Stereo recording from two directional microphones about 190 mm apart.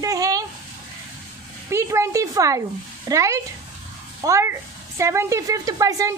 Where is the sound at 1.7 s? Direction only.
15° right (ahead or behind).